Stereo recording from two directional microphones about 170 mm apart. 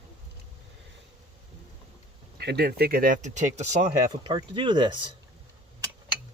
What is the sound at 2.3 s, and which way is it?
Speech, 70° right (ahead or behind).